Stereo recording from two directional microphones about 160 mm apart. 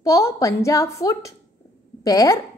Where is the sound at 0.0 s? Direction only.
20° left (ahead or behind).